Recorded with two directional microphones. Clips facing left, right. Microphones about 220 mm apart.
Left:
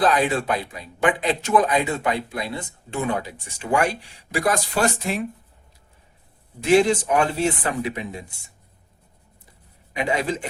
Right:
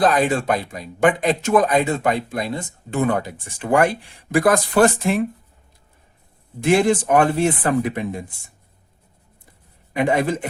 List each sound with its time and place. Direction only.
0.1 s speech: 45° right (ahead or behind)
6.6 s speech: 55° right (ahead or behind)
9.9 s speech: 55° right (ahead or behind)